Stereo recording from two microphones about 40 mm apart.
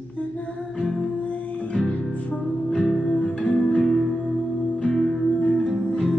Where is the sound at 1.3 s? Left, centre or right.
Left.